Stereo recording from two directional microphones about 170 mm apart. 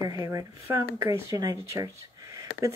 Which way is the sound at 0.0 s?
20° right (ahead or behind).